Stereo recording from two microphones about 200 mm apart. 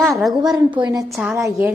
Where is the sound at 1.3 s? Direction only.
15° right (ahead or behind).